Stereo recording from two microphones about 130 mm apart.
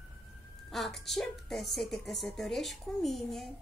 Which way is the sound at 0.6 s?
Centre (ahead or behind).